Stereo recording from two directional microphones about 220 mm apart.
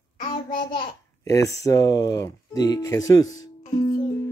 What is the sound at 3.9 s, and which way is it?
Music, 20° left (ahead or behind).